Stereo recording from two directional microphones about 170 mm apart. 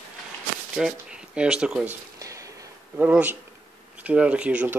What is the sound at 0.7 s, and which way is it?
Speech, 5° right (ahead or behind).